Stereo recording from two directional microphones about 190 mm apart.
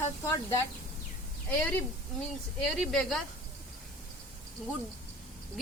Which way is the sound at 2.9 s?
Centre (ahead or behind).